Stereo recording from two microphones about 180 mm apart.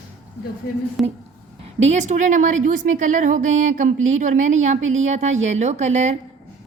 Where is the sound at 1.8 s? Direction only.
40° right (ahead or behind).